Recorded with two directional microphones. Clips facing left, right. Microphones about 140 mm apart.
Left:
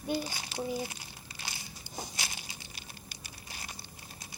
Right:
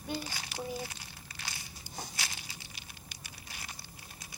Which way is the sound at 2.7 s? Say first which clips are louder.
Left 2 dB; 40° left (ahead or behind).